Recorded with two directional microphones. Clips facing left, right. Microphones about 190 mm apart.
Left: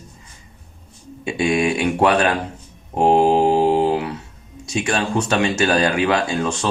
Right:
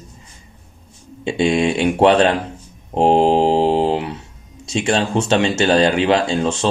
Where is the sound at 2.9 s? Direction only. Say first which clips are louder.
Right 1 dB; 25° right (ahead or behind).